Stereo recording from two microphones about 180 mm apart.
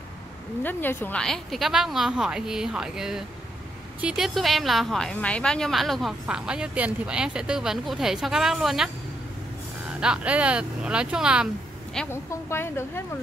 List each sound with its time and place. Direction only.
0.6 s a woman's voice: 10° left (ahead or behind)